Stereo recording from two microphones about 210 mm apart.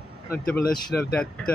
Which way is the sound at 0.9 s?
50° left (ahead or behind).